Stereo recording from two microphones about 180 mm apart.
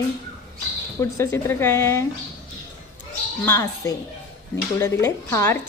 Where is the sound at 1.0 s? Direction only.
15° left (ahead or behind).